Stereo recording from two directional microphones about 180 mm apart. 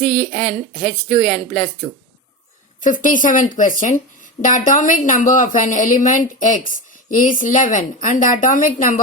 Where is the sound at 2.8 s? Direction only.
45° left (ahead or behind).